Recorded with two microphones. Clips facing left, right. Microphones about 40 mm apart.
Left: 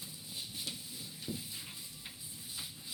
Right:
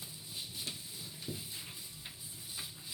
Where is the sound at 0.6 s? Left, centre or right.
Right.